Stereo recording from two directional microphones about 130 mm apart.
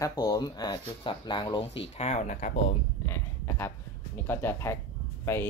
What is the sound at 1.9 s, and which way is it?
Speech, 55° left (ahead or behind).